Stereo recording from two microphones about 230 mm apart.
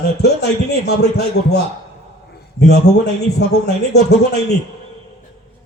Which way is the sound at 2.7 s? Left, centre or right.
Left.